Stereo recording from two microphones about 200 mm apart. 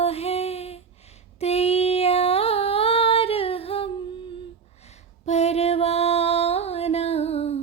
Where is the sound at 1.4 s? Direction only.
30° left (ahead or behind).